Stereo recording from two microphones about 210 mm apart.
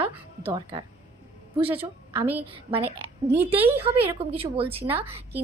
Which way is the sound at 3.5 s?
10° right (ahead or behind).